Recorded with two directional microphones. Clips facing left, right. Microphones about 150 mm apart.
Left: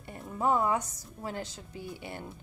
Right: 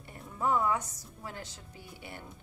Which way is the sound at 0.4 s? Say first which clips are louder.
Left 2 dB; 25° left (ahead or behind).